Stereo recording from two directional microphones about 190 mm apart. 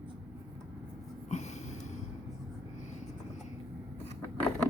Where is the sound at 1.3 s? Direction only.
35° left (ahead or behind).